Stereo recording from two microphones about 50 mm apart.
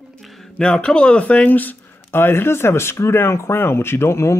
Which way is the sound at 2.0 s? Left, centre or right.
Left.